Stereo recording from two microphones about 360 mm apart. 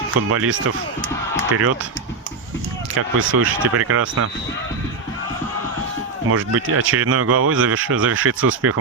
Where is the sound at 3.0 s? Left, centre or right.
Right.